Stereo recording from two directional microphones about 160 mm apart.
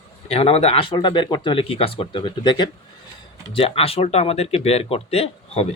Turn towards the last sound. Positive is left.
turn(degrees=40)  # may be behind; listen again after turning